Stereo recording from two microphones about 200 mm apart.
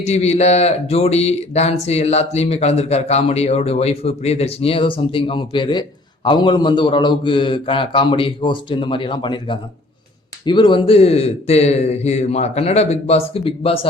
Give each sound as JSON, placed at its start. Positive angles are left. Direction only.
{"t": 0.0, "sound": "a man's voice", "side_deg": 35}